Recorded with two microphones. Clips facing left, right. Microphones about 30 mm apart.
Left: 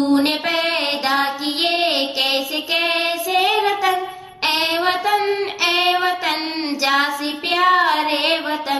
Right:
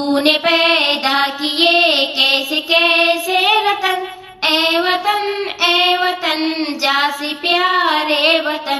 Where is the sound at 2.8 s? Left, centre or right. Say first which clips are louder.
Right 6 dB; right.